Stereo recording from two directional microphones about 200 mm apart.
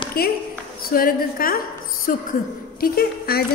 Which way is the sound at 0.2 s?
50° left (ahead or behind).